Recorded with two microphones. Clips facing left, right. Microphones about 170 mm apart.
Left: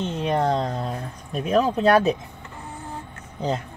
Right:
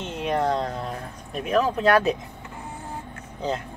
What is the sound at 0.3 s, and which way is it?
Speech, 30° left (ahead or behind).